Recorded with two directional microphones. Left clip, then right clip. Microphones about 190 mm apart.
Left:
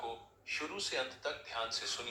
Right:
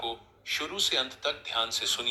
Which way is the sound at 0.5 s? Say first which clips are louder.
Right 9 dB; 40° right (ahead or behind).